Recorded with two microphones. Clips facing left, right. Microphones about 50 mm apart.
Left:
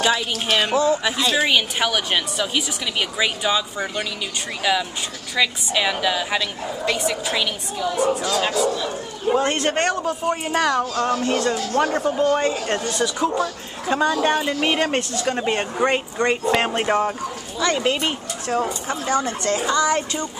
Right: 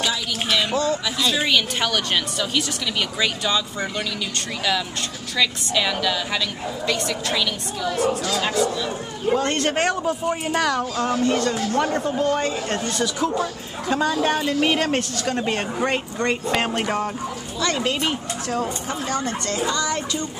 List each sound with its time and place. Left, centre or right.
0.1 s speech: left
0.7 s a woman's voice: centre
1.0 s a woman's voice: left; by 10.9 s centre
11.2 s speech: centre
11.8 s a woman's voice: centre
19.2 s speech: left